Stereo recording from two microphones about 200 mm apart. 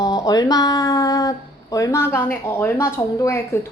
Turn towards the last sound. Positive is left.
turn(degrees=10)  # may be behind; listen again after turning